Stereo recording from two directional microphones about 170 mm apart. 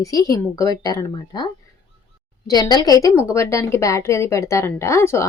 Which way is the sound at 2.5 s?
25° left (ahead or behind).